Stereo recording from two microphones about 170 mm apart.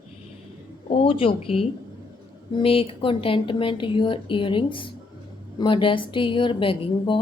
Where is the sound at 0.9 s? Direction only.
30° left (ahead or behind).